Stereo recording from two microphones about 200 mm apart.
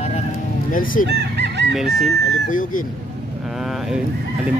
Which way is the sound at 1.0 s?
55° right (ahead or behind).